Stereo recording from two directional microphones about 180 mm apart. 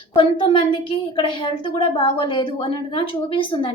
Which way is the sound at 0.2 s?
30° left (ahead or behind).